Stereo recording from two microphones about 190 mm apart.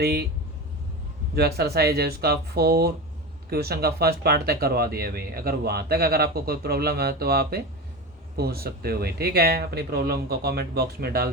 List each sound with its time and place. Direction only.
0.0 s speech: 55° right (ahead or behind)
1.4 s speech: 55° right (ahead or behind)